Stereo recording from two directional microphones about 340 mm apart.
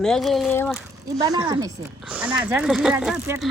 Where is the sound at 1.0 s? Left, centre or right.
Centre.